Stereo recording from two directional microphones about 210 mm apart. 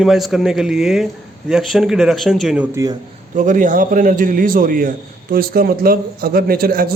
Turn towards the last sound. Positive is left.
turn(degrees=-45)  # may be behind; listen again after turning